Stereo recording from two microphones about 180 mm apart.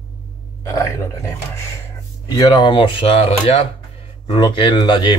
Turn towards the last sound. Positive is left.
turn(degrees=25)  # may be behind; listen again after turning